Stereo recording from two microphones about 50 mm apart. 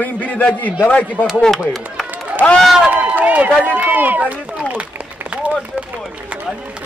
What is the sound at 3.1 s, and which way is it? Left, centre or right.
Speech, right.